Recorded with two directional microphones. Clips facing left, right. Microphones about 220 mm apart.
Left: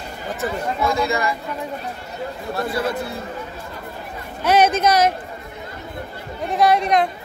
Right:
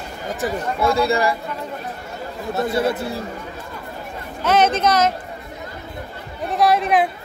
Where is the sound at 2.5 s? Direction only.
25° right (ahead or behind).